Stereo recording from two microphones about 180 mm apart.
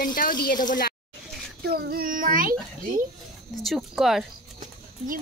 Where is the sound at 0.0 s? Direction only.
50° left (ahead or behind).